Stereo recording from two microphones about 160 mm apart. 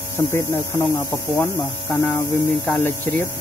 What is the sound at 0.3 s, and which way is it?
Speech, 15° left (ahead or behind).